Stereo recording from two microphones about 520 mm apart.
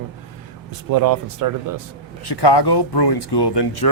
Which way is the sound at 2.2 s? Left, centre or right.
Left.